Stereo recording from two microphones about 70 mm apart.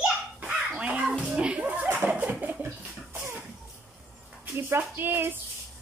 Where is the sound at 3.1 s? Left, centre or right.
Right.